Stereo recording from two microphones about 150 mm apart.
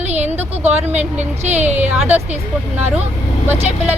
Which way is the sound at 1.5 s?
50° right (ahead or behind).